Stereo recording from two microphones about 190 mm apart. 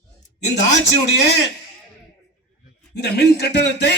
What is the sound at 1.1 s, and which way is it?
Speech, 60° left (ahead or behind).